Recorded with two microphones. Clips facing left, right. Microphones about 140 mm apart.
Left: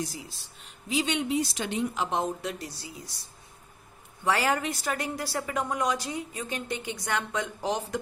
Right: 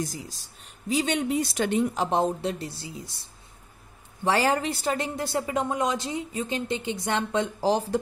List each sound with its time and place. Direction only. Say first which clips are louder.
0.0 s speech: right 3 dB; 45° right (ahead or behind)
2.0 s a woman's voice: right 5 dB; 35° right (ahead or behind)